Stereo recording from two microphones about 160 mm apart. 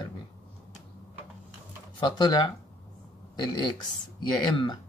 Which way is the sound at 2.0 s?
30° left (ahead or behind).